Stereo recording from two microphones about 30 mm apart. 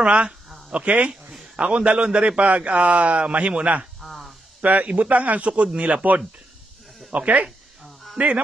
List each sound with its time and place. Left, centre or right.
0.0 s a man's voice: right
4.0 s a sound: centre
4.6 s a man's voice: right
5.4 s a man's voice: right
7.1 s a man's voice: right